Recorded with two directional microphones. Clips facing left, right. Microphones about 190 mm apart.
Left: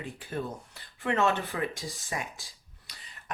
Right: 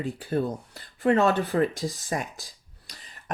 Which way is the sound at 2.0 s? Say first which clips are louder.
Right 6 dB; 40° right (ahead or behind).